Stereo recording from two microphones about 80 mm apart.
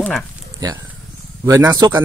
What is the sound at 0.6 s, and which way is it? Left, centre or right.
Speech, right.